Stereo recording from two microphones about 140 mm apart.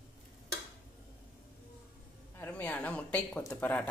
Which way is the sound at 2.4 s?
10° left (ahead or behind).